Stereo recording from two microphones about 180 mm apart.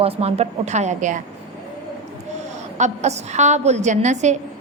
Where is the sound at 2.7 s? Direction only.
40° right (ahead or behind).